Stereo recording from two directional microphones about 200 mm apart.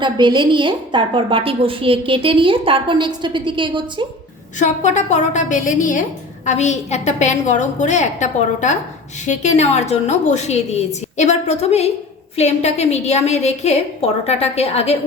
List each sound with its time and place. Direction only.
0.0 s a woman's voice: 20° right (ahead or behind)
4.6 s a woman's voice: 35° left (ahead or behind)